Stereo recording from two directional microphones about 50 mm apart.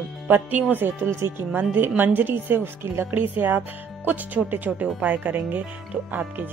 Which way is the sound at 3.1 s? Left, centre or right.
Right.